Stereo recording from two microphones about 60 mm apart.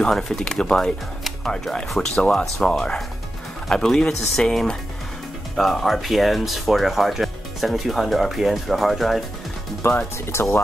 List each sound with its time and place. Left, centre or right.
0.0 s speech: centre
9.8 s speech: left